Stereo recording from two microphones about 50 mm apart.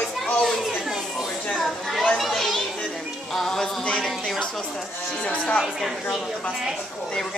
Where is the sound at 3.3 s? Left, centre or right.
Centre.